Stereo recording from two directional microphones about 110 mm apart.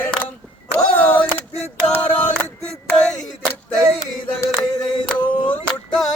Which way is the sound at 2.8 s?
5° left (ahead or behind).